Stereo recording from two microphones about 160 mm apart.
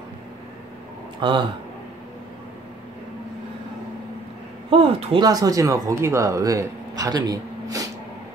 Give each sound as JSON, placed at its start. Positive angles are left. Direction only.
{"t": 1.2, "sound": "speech", "side_deg": -30}
{"t": 4.6, "sound": "speech", "side_deg": -35}